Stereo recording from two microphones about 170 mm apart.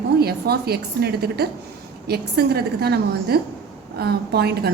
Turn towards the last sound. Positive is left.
turn(degrees=-70)  # may be behind; listen again after turning